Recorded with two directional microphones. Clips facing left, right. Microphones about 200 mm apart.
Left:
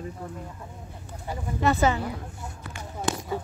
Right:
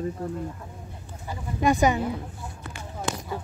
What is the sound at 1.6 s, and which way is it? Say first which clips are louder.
Speech: right 2 dB; 15° right (ahead or behind).